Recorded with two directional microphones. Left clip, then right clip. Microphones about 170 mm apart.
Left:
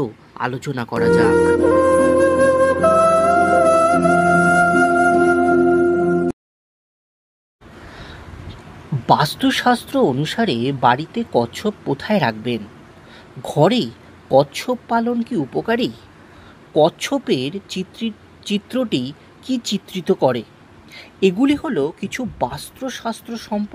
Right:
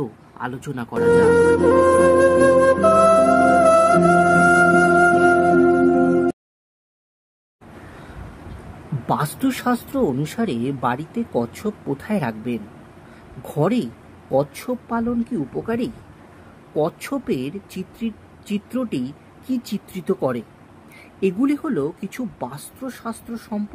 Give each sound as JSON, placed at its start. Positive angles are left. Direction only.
{"t": 0.0, "sound": "speech", "side_deg": 35}
{"t": 1.3, "sound": "music", "side_deg": 0}
{"t": 9.0, "sound": "speech", "side_deg": 30}